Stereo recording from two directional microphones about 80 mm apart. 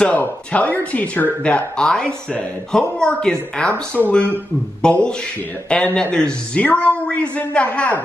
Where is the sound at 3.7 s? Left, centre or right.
Centre.